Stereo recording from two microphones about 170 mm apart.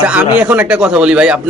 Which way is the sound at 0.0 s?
10° right (ahead or behind).